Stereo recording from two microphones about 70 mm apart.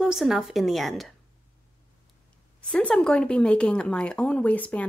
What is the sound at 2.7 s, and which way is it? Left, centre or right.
Speech, centre.